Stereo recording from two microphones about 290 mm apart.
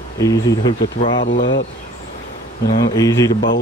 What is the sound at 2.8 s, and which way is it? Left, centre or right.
Speech, centre.